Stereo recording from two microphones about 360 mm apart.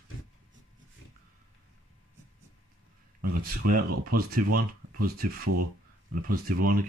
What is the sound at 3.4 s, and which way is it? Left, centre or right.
Speech, right.